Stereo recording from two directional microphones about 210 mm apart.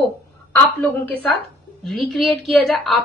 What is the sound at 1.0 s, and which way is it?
A woman's voice, 10° left (ahead or behind).